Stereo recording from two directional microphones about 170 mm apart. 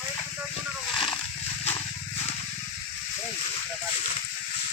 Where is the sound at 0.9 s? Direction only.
30° left (ahead or behind).